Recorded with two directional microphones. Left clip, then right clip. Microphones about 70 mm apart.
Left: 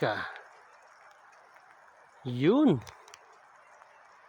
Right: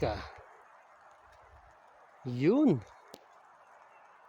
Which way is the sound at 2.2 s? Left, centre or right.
Left.